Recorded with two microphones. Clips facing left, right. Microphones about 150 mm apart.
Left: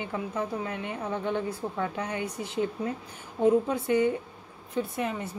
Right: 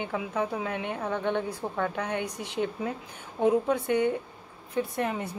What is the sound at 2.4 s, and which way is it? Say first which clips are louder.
Speech: left 1 dB; 70° right (ahead or behind).